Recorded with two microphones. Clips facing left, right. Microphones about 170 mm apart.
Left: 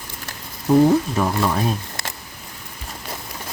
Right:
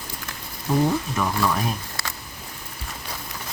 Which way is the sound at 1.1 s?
25° left (ahead or behind).